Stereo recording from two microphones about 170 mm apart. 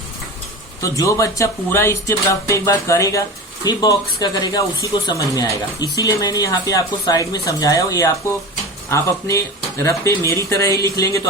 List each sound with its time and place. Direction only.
0.8 s speech: 20° left (ahead or behind)